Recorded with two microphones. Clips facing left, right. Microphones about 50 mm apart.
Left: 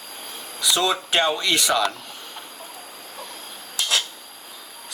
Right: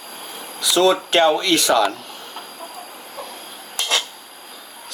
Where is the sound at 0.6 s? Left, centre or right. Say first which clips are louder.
Right 6 dB; centre.